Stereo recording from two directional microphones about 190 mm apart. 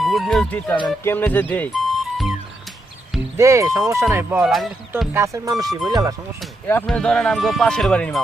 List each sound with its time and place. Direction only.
0.0 s speech: centre (ahead or behind)
3.3 s speech: 15° right (ahead or behind)
5.1 s speech: 15° right (ahead or behind)
6.7 s speech: 10° left (ahead or behind)